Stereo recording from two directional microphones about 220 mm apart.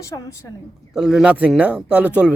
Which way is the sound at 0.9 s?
5° right (ahead or behind).